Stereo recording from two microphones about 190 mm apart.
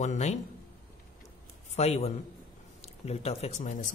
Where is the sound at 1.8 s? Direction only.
35° left (ahead or behind).